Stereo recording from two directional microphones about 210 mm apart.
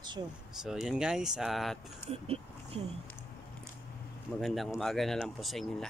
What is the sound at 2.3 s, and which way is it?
Speech, 30° right (ahead or behind).